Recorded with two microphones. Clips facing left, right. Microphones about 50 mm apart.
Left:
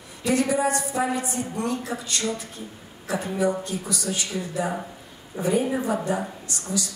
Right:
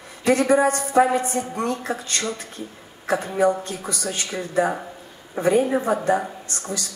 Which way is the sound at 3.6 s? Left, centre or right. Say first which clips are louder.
Right 1 dB; right.